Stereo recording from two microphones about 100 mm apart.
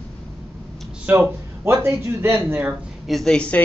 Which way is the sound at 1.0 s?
20° right (ahead or behind).